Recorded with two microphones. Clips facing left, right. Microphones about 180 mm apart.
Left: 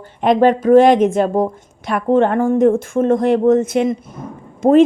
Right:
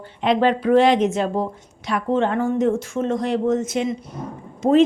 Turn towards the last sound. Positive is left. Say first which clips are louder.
# left 5 dB
turn(degrees=50)  # may be behind; listen again after turning